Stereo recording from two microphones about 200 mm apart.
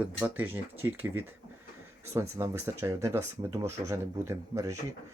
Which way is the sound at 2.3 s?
15° right (ahead or behind).